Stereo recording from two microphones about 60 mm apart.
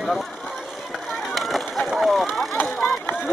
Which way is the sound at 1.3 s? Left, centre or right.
Centre.